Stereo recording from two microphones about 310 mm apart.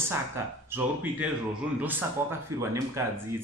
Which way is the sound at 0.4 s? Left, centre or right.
Centre.